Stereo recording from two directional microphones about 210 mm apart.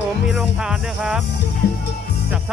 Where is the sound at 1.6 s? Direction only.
50° left (ahead or behind).